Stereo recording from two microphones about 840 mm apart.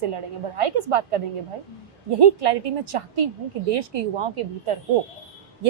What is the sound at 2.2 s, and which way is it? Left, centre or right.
A woman's voice, right.